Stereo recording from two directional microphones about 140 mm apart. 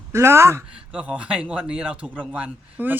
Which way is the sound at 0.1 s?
20° right (ahead or behind).